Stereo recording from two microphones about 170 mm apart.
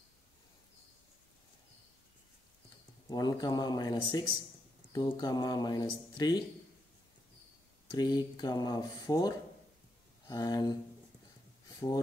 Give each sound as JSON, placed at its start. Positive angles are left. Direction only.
{"t": 3.1, "sound": "speech", "side_deg": 20}
{"t": 7.9, "sound": "speech", "side_deg": 25}